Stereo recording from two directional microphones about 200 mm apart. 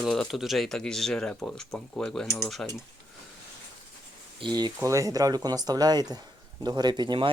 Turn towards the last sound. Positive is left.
turn(degrees=-20)  # may be behind; listen again after turning